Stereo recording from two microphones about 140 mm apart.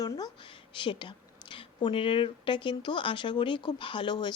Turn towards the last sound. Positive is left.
turn(degrees=30)  # may be behind; listen again after turning